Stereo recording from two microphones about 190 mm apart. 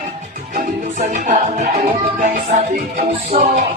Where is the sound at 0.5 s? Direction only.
40° right (ahead or behind).